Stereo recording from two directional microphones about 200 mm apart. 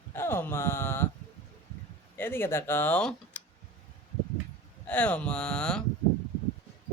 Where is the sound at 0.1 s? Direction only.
10° left (ahead or behind).